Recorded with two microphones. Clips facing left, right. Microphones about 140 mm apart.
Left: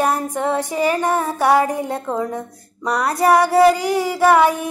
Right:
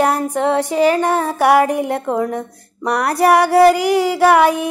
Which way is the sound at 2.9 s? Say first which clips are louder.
Right 2 dB; 70° right (ahead or behind).